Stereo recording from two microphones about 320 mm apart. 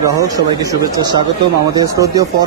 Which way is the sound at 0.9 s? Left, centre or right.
Centre.